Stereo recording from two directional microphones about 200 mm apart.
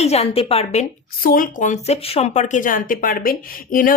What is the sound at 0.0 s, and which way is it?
A woman's voice, 30° left (ahead or behind).